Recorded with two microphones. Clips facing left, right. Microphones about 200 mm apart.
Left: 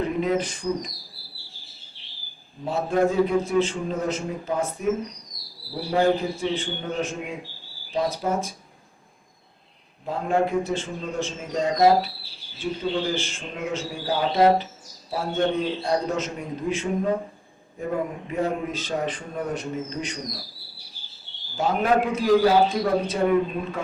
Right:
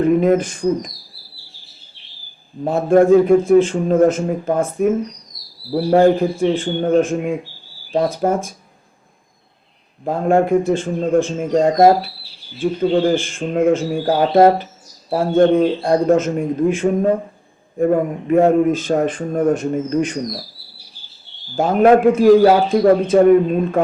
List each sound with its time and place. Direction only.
0.0 s a man's voice: 50° right (ahead or behind)
2.6 s a man's voice: 50° right (ahead or behind)
10.1 s a man's voice: 50° right (ahead or behind)
21.5 s a man's voice: 50° right (ahead or behind)